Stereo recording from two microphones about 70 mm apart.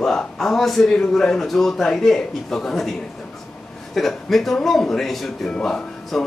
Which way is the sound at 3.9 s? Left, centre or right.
Centre.